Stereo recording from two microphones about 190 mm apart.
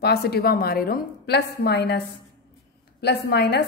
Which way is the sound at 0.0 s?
60° left (ahead or behind).